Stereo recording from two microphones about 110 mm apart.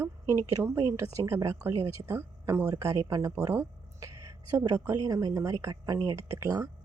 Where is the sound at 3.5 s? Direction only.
30° right (ahead or behind).